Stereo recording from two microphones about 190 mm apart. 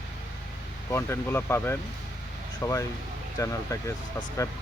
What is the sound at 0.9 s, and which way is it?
Speech, 15° left (ahead or behind).